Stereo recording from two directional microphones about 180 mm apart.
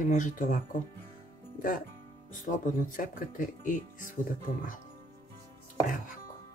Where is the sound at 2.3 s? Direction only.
45° left (ahead or behind).